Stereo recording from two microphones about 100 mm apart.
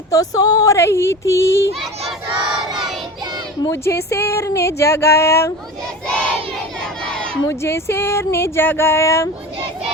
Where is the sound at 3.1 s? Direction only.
45° right (ahead or behind).